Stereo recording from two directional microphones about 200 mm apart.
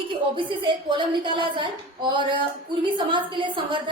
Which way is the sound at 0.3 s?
25° right (ahead or behind).